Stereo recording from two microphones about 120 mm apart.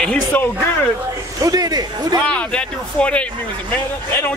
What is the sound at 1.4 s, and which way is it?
Speech, 30° right (ahead or behind).